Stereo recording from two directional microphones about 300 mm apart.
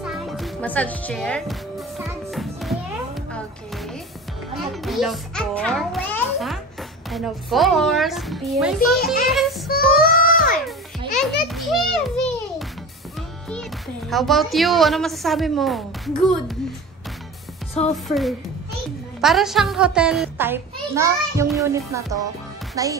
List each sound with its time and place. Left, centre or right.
0.0 s music: centre
4.6 s a child's voice: centre
9.7 s child singing: left
11.1 s music: centre
14.1 s a child's voice: centre
17.9 s a child's voice: centre